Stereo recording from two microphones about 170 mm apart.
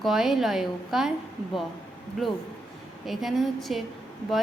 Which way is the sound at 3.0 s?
Centre (ahead or behind).